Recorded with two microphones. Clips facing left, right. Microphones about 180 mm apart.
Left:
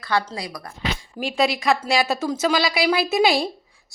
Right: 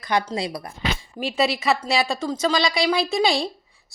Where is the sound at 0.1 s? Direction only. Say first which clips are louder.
Right 1 dB; 20° right (ahead or behind).